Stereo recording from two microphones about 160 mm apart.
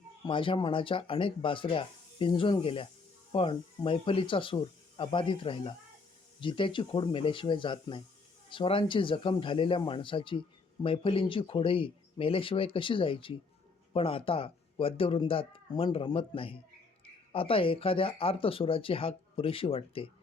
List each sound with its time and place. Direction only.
0.3 s speech: 30° left (ahead or behind)